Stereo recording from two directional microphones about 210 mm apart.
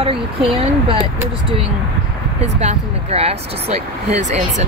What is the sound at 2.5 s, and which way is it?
Speech, 30° right (ahead or behind).